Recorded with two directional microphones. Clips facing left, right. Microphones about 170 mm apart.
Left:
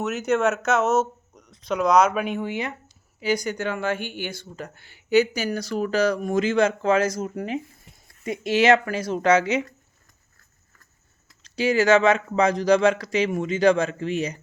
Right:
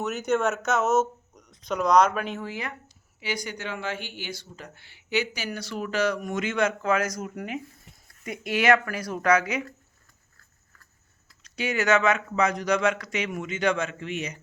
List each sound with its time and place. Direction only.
0.0 s speech: centre (ahead or behind); by 2.7 s 20° left (ahead or behind)
3.2 s speech: 40° left (ahead or behind); by 9.7 s 25° left (ahead or behind)
11.4 s speech: 30° left (ahead or behind)